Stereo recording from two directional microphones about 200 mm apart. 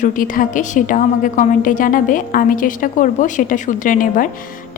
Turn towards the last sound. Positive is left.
turn(degrees=45)  # may be behind; listen again after turning